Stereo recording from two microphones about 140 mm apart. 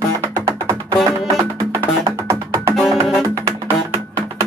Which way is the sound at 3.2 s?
25° right (ahead or behind).